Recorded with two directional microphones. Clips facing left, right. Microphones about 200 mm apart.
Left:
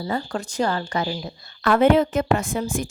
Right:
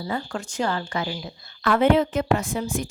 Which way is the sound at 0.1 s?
35° left (ahead or behind).